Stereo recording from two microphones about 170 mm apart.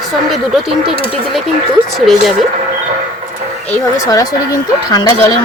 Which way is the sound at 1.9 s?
Centre (ahead or behind).